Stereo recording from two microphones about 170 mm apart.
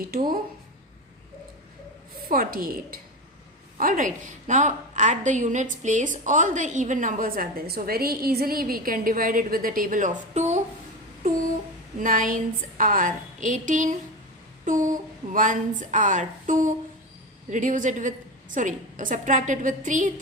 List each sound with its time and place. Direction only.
2.3 s a woman's voice: 55° right (ahead or behind)
11.9 s a woman's voice: 50° right (ahead or behind)